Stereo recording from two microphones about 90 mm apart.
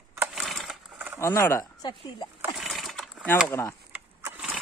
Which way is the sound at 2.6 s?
Centre (ahead or behind).